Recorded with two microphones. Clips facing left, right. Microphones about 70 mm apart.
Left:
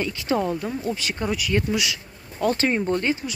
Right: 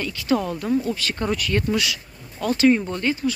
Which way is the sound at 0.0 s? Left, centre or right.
Left.